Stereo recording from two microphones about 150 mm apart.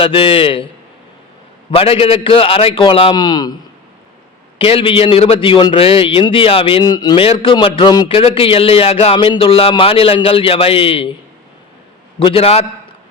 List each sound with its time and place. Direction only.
0.0 s a man's voice: 35° left (ahead or behind)
1.7 s a man's voice: 40° left (ahead or behind)
4.5 s a man's voice: 40° left (ahead or behind)
12.2 s a man's voice: 40° left (ahead or behind)